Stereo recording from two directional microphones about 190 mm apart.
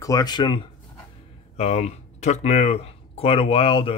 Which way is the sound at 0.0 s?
20° left (ahead or behind).